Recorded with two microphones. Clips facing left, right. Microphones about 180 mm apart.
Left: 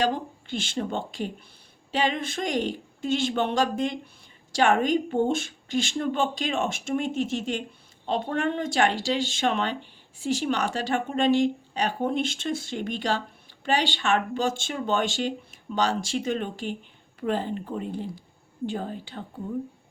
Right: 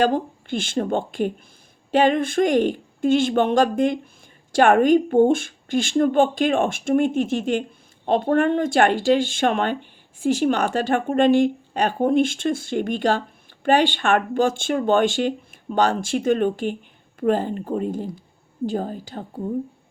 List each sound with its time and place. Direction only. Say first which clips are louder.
0.0 s a woman's voice: right 6 dB; 50° right (ahead or behind)